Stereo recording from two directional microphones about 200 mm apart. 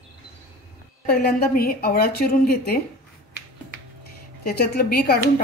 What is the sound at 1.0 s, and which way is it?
A woman's voice, 50° left (ahead or behind).